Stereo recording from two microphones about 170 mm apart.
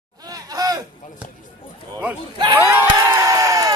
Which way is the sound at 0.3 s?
20° right (ahead or behind).